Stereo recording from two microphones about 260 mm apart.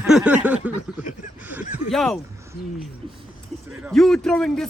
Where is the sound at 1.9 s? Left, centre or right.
Centre.